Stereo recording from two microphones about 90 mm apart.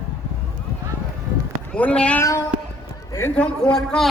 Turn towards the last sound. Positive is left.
turn(degrees=5)  # may be behind; listen again after turning